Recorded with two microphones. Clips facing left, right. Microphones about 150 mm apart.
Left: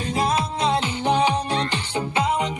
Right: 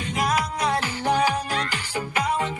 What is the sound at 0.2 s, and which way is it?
Music, 25° left (ahead or behind).